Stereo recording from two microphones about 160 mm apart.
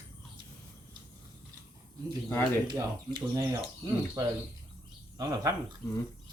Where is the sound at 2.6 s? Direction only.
25° right (ahead or behind).